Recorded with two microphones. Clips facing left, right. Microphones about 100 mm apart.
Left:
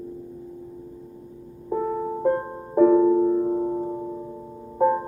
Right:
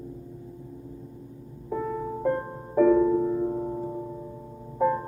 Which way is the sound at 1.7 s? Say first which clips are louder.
Left 4 dB; 35° left (ahead or behind).